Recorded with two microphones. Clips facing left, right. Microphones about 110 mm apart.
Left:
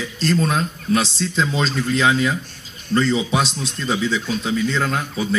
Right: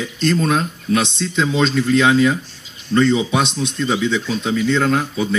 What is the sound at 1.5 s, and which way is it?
Speech, 35° left (ahead or behind).